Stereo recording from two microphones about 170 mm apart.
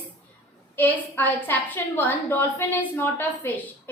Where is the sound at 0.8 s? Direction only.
10° left (ahead or behind).